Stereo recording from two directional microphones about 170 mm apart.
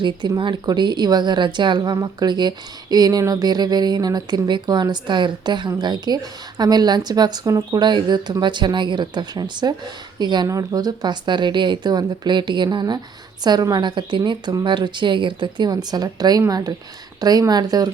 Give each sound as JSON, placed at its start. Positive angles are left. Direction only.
{"t": 0.0, "sound": "a woman's voice", "side_deg": -25}